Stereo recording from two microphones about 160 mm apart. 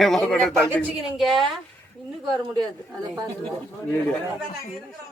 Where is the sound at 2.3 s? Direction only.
25° right (ahead or behind).